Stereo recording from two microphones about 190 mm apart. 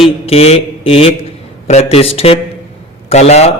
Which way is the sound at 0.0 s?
30° left (ahead or behind).